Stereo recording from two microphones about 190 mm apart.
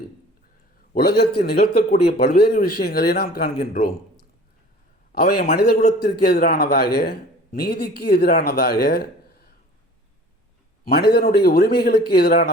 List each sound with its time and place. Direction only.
0.9 s a man's voice: 55° left (ahead or behind)
5.5 s a man's voice: 40° left (ahead or behind)
6.0 s a man's voice: 55° left (ahead or behind)
10.8 s a man's voice: 55° left (ahead or behind)